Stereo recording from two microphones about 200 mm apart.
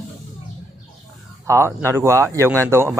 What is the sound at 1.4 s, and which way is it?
Speech, 15° right (ahead or behind).